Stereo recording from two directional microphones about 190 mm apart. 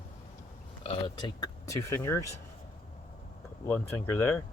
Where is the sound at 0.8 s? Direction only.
25° left (ahead or behind).